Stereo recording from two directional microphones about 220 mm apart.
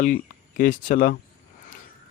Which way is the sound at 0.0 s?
40° left (ahead or behind).